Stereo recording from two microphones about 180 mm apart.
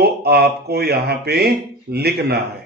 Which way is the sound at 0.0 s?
60° right (ahead or behind).